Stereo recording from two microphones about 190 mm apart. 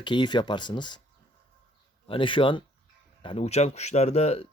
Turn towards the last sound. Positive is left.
turn(degrees=35)  # may be behind; listen again after turning